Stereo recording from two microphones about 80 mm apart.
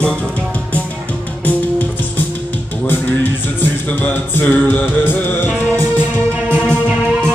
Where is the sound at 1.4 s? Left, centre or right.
Left.